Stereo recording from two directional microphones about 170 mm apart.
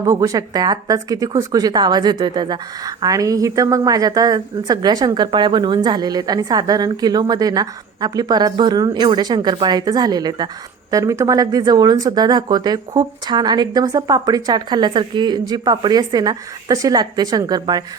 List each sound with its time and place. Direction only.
0.0 s speech: 20° right (ahead or behind)